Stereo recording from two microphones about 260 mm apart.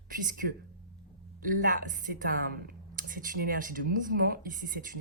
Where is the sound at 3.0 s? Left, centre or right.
Right.